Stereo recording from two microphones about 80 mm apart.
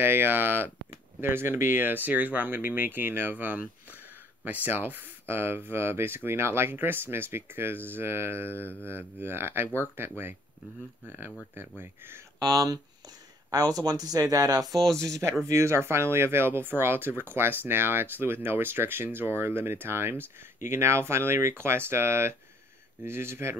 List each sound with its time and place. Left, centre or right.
0.0 s speech: right
12.4 s speech: right
15.0 s speech: right